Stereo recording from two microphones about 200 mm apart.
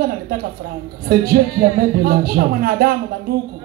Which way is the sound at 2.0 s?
50° right (ahead or behind).